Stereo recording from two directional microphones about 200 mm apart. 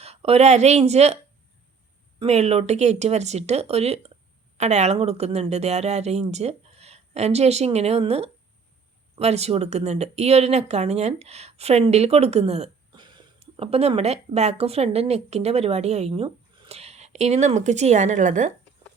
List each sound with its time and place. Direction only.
0.0 s speech: 30° right (ahead or behind)